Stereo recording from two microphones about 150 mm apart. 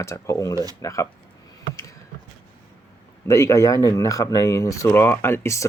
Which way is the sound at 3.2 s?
20° left (ahead or behind).